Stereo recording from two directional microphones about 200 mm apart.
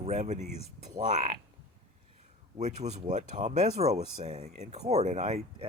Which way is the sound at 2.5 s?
35° right (ahead or behind).